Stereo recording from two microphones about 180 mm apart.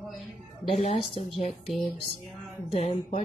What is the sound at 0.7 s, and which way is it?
Speech, 40° left (ahead or behind).